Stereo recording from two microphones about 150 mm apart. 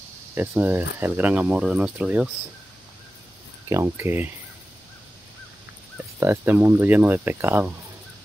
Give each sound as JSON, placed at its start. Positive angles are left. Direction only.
{"t": 0.3, "sound": "speech", "side_deg": -10}
{"t": 3.6, "sound": "speech", "side_deg": -20}
{"t": 6.1, "sound": "speech", "side_deg": -15}